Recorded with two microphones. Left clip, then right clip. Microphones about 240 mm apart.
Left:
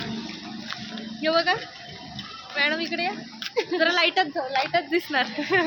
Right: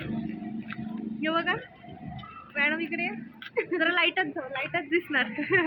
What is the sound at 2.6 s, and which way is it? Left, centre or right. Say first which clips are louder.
A woman's voice: left 3 dB; centre.